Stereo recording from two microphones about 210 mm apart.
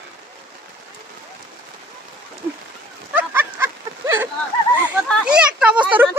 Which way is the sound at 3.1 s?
10° right (ahead or behind).